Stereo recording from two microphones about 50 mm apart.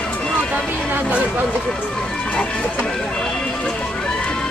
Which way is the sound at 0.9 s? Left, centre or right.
Right.